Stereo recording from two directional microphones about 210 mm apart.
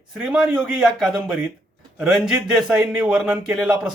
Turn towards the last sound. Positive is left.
turn(degrees=-5)  # may be behind; listen again after turning